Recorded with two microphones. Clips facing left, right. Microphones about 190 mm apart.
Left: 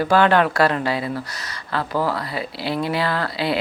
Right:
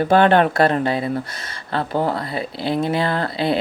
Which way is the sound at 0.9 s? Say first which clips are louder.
Right 3 dB; 25° right (ahead or behind).